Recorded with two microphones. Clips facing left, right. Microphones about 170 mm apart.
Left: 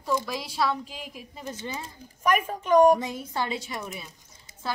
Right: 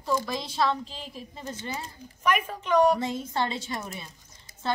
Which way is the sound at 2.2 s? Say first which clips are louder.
Left 2 dB; 40° left (ahead or behind).